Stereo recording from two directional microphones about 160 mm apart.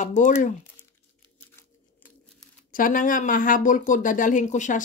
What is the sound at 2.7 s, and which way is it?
Speech, 60° left (ahead or behind).